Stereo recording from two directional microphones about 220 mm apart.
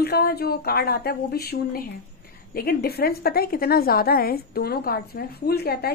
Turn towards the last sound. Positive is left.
turn(degrees=45)  # may be behind; listen again after turning